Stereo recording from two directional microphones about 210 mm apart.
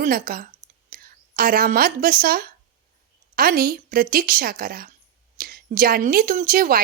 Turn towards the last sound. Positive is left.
turn(degrees=-40)  # may be behind; listen again after turning